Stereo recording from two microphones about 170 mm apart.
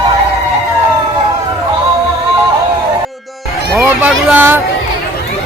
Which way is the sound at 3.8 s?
10° right (ahead or behind).